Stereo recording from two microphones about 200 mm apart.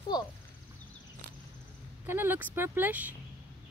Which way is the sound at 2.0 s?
10° right (ahead or behind).